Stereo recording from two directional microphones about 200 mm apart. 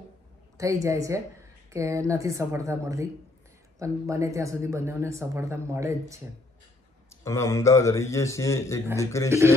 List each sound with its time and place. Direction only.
0.6 s speech: 15° right (ahead or behind)
7.1 s a man's voice: 15° left (ahead or behind)
9.3 s speech: 15° right (ahead or behind)